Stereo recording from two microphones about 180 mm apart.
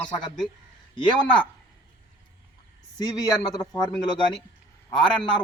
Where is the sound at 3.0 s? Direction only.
20° left (ahead or behind).